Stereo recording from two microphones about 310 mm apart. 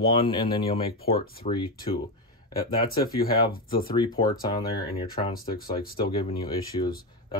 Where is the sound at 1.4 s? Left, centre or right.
Left.